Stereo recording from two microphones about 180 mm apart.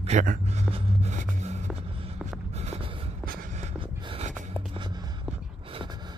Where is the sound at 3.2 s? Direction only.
50° right (ahead or behind); by 4.3 s 35° right (ahead or behind).